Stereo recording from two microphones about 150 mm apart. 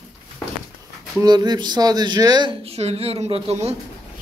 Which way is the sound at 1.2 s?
25° right (ahead or behind).